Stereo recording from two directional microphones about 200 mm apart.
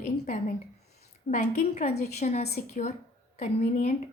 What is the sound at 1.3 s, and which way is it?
A woman's voice, 35° left (ahead or behind).